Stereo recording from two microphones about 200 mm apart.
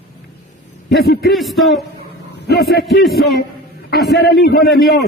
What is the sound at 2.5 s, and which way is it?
Speech, 55° left (ahead or behind).